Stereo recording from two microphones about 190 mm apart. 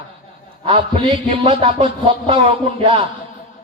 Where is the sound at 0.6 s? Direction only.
30° right (ahead or behind).